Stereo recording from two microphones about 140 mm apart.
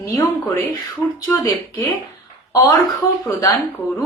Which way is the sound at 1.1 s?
25° left (ahead or behind).